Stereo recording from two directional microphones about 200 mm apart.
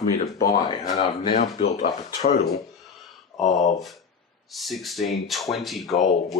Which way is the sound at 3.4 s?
Centre (ahead or behind).